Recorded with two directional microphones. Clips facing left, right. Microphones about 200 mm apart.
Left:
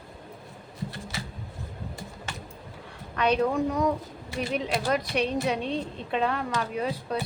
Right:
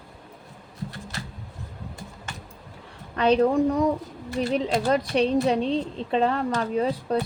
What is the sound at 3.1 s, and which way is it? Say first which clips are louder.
Speech: right 5 dB; 30° right (ahead or behind).